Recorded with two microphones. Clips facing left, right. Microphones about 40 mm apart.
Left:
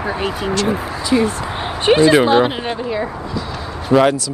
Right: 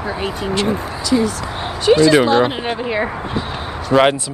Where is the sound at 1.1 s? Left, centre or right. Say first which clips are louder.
Left 1 dB; left.